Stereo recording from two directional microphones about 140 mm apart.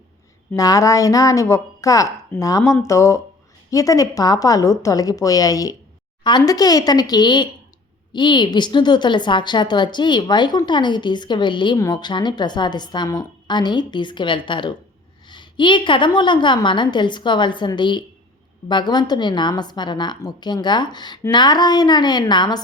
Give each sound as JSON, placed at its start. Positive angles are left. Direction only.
{"t": 0.5, "sound": "a woman's voice", "side_deg": 25}